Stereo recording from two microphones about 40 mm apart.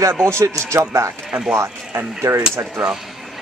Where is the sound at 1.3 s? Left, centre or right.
Right.